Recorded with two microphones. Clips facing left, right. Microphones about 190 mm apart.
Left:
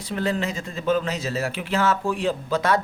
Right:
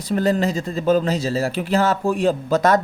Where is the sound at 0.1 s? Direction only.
40° right (ahead or behind).